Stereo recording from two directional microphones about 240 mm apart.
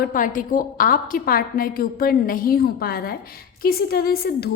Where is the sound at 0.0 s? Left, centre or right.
Left.